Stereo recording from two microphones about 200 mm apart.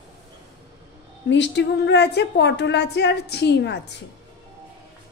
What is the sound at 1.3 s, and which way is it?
A woman's voice, 60° left (ahead or behind).